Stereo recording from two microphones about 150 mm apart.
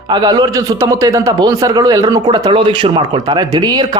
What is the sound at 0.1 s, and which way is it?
A man's voice, 25° right (ahead or behind).